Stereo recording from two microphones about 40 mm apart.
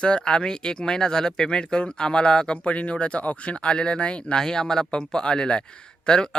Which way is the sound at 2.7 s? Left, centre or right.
Left.